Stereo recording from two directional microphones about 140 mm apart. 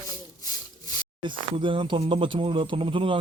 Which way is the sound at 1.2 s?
35° right (ahead or behind).